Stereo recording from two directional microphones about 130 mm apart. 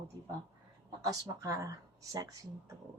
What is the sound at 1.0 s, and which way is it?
Speech, 25° right (ahead or behind).